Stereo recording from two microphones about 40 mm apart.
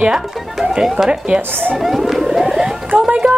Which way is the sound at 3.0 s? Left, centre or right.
Right.